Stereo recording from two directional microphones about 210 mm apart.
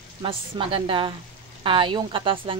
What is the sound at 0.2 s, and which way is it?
Speech, 25° right (ahead or behind).